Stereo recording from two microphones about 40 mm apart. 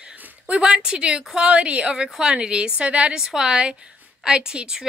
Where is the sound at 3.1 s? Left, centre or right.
Centre.